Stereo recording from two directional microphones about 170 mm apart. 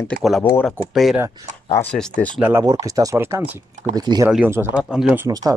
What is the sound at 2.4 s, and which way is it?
Speech, 15° right (ahead or behind).